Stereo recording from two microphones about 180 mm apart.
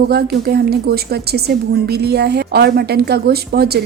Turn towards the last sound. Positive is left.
turn(degrees=-60)  # may be behind; listen again after turning